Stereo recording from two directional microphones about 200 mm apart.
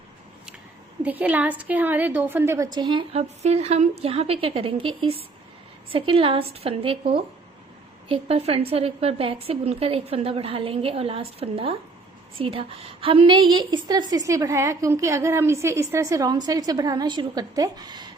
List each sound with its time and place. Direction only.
1.0 s a woman's voice: 5° right (ahead or behind)